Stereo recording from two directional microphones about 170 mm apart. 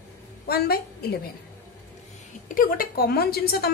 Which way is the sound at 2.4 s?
55° left (ahead or behind).